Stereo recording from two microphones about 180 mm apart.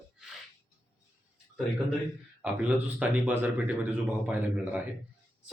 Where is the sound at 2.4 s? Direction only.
10° right (ahead or behind).